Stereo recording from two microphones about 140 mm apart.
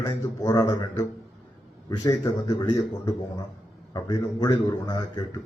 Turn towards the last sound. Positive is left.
turn(degrees=30)  # may be behind; listen again after turning